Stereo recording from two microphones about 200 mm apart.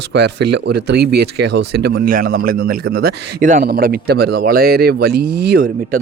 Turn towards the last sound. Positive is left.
turn(degrees=-50)  # may be behind; listen again after turning